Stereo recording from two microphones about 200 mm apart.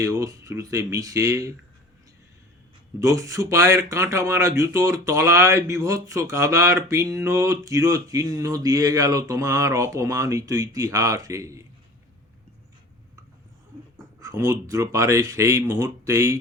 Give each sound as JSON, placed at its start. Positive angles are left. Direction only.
{"t": 0.0, "sound": "speech", "side_deg": -15}
{"t": 3.0, "sound": "speech", "side_deg": -15}
{"t": 14.2, "sound": "speech", "side_deg": -15}